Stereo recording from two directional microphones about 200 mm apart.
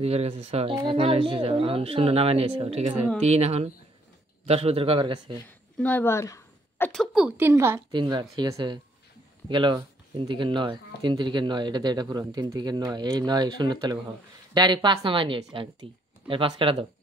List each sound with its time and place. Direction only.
0.0 s speech: 30° right (ahead or behind)
5.8 s a sound: 10° left (ahead or behind)
6.9 s a woman's voice: centre (ahead or behind); by 16.8 s 25° right (ahead or behind)